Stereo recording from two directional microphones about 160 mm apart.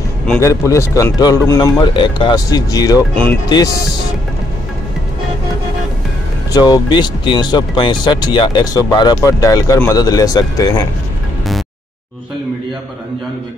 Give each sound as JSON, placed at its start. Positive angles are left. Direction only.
{"t": 0.4, "sound": "speech", "side_deg": 20}
{"t": 6.5, "sound": "speech", "side_deg": 25}